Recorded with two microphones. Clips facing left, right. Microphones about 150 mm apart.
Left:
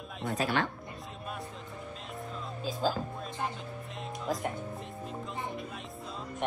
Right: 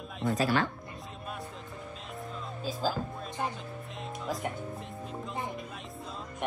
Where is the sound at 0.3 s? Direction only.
40° right (ahead or behind).